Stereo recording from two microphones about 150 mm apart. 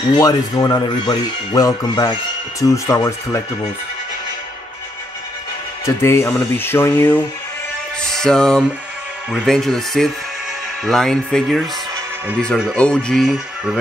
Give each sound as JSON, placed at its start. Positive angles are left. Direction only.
{"t": 0.1, "sound": "speech", "side_deg": 25}
{"t": 5.9, "sound": "speech", "side_deg": 15}
{"t": 8.0, "sound": "speech", "side_deg": 5}